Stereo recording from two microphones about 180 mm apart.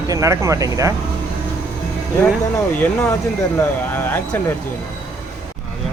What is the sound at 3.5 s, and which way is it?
Speech, 10° left (ahead or behind).